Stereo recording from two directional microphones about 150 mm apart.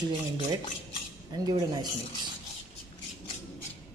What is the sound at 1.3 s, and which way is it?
Speech, 25° right (ahead or behind).